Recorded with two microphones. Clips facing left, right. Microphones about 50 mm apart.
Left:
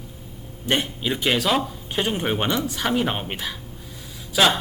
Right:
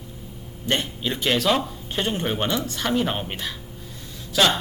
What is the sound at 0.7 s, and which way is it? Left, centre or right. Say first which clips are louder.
Speech: left 2 dB; centre.